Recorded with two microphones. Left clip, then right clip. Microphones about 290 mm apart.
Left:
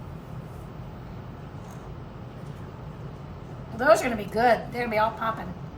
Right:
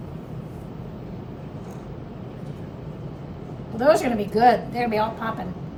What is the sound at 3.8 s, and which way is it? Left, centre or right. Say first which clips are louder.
A woman's voice: right 2 dB; centre.